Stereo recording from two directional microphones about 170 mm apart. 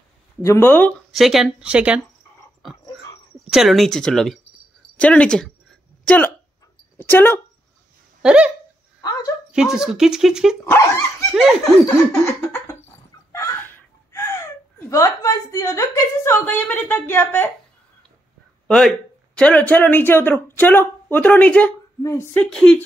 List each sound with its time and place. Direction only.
0.4 s speech: 15° left (ahead or behind)
1.1 s speech: centre (ahead or behind)
3.3 s speech: centre (ahead or behind)
8.2 s speech: 5° right (ahead or behind)
9.5 s speech: 5° right (ahead or behind)
10.6 s speech: 15° left (ahead or behind)
18.7 s speech: 5° left (ahead or behind)